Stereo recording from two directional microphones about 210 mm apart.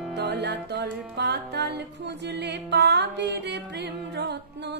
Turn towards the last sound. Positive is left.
turn(degrees=-55)  # may be behind; listen again after turning